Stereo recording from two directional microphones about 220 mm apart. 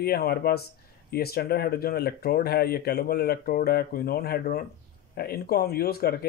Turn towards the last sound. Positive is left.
turn(degrees=45)  # may be behind; listen again after turning